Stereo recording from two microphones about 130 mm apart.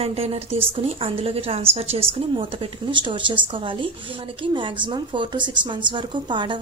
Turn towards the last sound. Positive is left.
turn(degrees=-40)  # may be behind; listen again after turning